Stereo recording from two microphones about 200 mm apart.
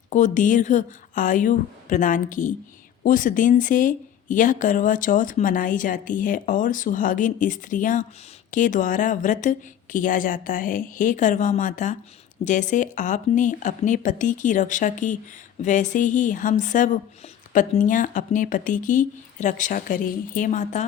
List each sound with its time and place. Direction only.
0.1 s speech: 40° left (ahead or behind)